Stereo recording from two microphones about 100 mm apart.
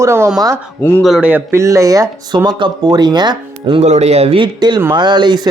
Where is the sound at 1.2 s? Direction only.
20° right (ahead or behind); by 3.8 s 45° right (ahead or behind).